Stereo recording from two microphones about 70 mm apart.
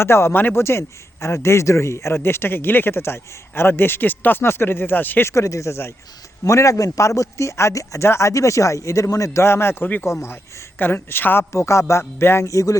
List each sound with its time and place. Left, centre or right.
0.0 s a man's voice: left
5.3 s a man's voice: left
9.4 s a man's voice: left
11.5 s a man's voice: left
12.5 s a man's voice: left